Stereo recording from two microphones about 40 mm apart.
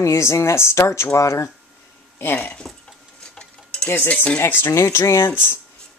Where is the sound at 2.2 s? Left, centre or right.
Left.